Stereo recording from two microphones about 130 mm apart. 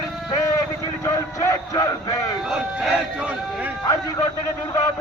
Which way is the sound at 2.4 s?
5° right (ahead or behind).